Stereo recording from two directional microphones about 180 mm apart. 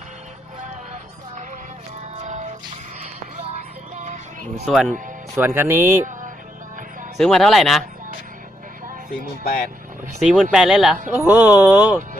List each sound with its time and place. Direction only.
2.1 s music: 40° right (ahead or behind)
3.9 s music: 40° right (ahead or behind)
4.6 s speech: centre (ahead or behind)
7.2 s speech: centre (ahead or behind)
10.2 s speech: centre (ahead or behind)